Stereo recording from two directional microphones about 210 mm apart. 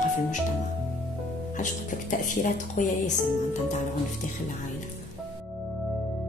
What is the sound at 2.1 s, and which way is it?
A woman's voice, 40° left (ahead or behind).